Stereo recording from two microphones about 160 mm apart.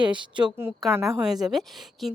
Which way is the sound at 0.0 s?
30° right (ahead or behind).